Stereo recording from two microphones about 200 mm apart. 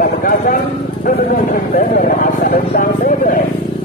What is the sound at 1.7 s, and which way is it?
A man's voice, 45° left (ahead or behind).